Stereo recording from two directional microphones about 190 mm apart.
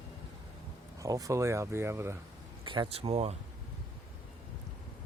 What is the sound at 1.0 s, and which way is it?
Speech, 20° right (ahead or behind).